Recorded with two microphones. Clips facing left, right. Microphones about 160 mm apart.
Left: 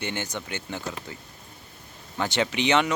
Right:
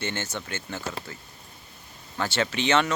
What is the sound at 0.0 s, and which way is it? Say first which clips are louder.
Speech: even; 15° left (ahead or behind).